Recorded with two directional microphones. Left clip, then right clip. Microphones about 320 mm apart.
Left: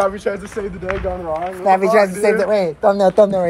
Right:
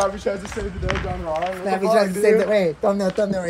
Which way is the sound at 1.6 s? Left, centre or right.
Centre.